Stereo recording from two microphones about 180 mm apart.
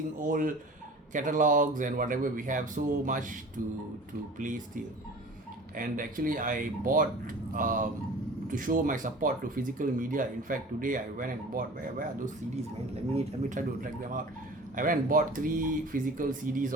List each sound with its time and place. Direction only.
0.2 s speech: 50° right (ahead or behind)